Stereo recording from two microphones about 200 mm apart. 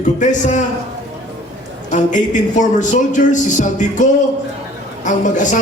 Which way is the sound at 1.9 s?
40° left (ahead or behind).